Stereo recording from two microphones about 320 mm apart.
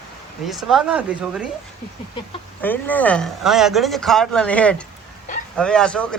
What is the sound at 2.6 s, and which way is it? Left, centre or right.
Speech, centre.